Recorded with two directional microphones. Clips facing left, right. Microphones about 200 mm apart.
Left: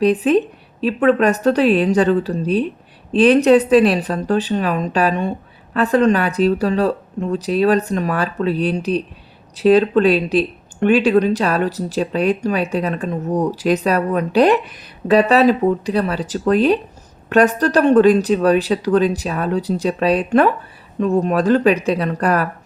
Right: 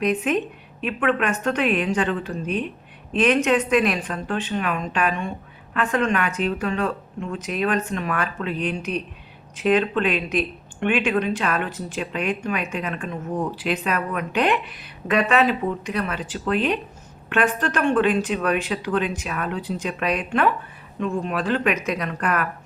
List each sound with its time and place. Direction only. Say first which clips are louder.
0.0 s speech: left 7 dB; 35° left (ahead or behind)